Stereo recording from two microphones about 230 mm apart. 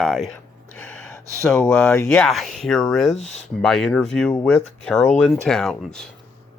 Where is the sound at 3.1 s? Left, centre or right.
Left.